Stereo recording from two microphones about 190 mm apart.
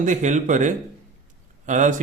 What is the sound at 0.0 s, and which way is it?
Speech, 40° right (ahead or behind).